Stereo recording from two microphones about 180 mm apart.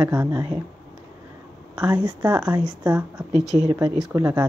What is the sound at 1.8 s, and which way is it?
Speech, 10° right (ahead or behind).